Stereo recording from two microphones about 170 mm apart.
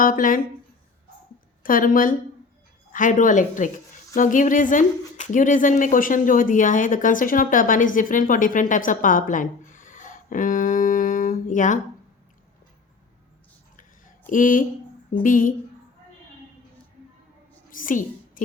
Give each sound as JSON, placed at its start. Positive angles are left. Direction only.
{"t": 0.0, "sound": "speech", "side_deg": 55}
{"t": 1.6, "sound": "speech", "side_deg": 55}
{"t": 14.3, "sound": "speech", "side_deg": 50}
{"t": 17.7, "sound": "a sound", "side_deg": 55}